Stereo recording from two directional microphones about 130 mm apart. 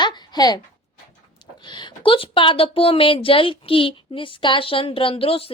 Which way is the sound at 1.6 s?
35° left (ahead or behind).